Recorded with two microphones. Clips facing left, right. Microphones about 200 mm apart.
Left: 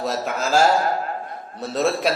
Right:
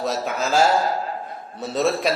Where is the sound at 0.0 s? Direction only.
Centre (ahead or behind).